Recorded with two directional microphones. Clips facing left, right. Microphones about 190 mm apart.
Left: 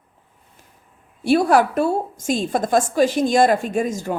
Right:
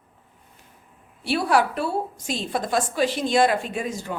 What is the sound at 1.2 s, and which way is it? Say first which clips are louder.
A woman's voice: left 6 dB; 45° left (ahead or behind).